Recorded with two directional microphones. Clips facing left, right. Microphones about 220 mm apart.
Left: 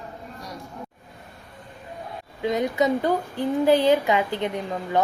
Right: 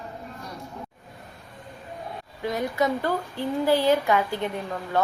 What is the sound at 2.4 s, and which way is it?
A woman's voice, 20° left (ahead or behind).